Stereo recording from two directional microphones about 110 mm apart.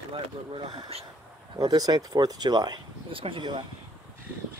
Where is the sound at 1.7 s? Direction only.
35° right (ahead or behind).